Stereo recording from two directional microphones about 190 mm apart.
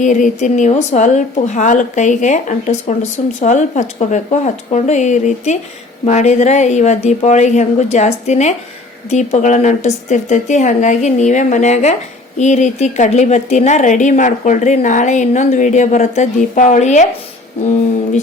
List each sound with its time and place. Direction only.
0.0 s a woman's voice: 40° left (ahead or behind)